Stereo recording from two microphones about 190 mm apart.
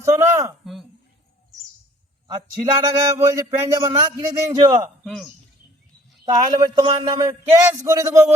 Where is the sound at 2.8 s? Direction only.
15° right (ahead or behind).